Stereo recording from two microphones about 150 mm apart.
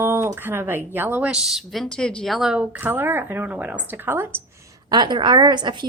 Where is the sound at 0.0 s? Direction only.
15° right (ahead or behind).